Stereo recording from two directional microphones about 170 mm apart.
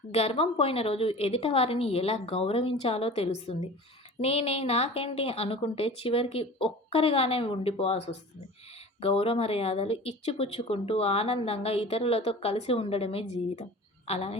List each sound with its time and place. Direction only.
0.1 s speech: 35° left (ahead or behind)